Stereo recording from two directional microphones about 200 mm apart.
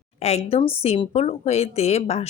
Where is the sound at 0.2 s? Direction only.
30° left (ahead or behind).